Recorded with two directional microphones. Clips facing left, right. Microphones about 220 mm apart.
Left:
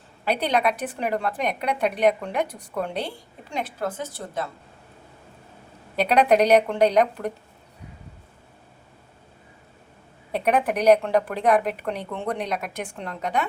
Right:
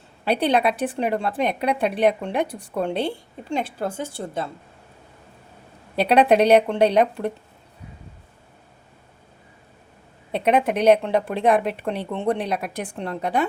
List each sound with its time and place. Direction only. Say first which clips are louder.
0.3 s a woman's voice: right 3 dB; 30° right (ahead or behind)
6.0 s a woman's voice: right 2 dB; 30° right (ahead or behind)
10.3 s a woman's voice: right 2 dB; 25° right (ahead or behind)